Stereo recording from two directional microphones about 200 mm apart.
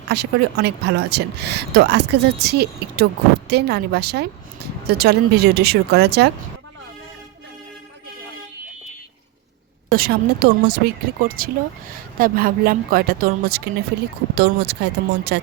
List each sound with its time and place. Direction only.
0.1 s speech: 55° right (ahead or behind)
9.9 s speech: 50° right (ahead or behind)